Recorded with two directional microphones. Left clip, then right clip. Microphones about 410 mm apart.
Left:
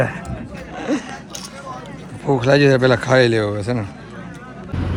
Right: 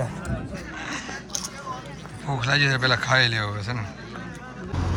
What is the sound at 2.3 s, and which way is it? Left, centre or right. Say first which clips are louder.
Speech: left 8 dB; centre.